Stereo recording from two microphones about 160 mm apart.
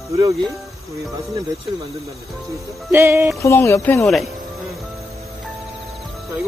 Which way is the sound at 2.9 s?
15° right (ahead or behind).